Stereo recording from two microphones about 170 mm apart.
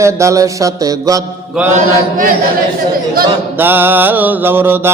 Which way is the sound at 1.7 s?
50° right (ahead or behind).